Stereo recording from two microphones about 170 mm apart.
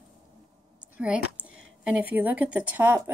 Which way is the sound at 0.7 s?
5° right (ahead or behind).